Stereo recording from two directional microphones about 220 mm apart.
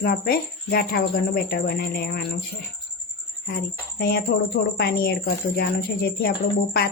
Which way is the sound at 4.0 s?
45° left (ahead or behind).